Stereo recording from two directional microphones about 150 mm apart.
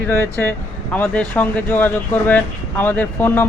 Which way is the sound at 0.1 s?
15° left (ahead or behind).